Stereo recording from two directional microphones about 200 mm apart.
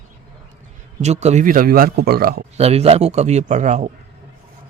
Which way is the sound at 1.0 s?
35° right (ahead or behind).